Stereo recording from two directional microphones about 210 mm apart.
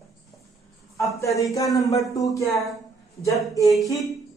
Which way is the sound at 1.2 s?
15° left (ahead or behind).